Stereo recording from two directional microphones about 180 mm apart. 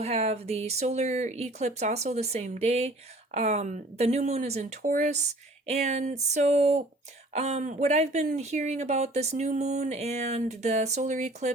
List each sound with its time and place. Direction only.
0.0 s speech: 35° right (ahead or behind)